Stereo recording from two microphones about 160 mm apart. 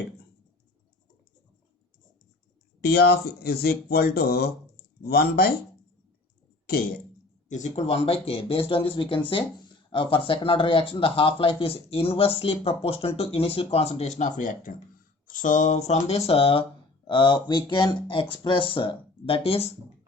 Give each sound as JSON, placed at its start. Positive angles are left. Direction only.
{"t": 2.8, "sound": "speech", "side_deg": 90}
{"t": 6.7, "sound": "speech", "side_deg": 70}
{"t": 7.4, "sound": "speech", "side_deg": 50}